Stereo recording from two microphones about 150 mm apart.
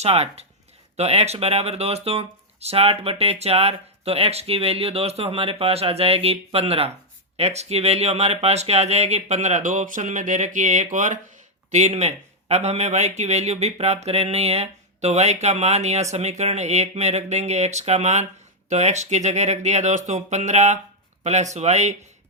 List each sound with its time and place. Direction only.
0.0 s a man's voice: 45° right (ahead or behind)